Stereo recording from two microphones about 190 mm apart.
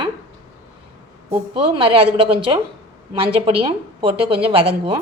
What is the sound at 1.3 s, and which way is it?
A woman's voice, 30° right (ahead or behind).